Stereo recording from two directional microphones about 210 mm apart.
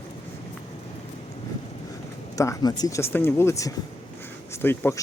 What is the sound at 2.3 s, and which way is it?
Speech, 15° left (ahead or behind).